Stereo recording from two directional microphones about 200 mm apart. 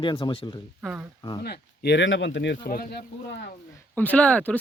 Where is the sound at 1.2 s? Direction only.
20° left (ahead or behind).